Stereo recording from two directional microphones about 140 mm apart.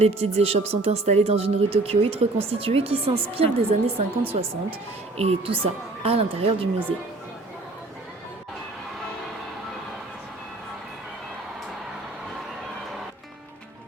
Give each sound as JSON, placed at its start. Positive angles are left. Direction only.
{"t": 0.0, "sound": "speech", "side_deg": -50}